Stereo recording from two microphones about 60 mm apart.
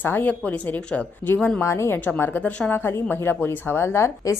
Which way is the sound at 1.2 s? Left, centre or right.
Left.